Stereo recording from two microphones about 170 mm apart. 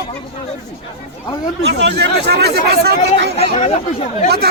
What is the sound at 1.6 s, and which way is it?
Speech, 90° right.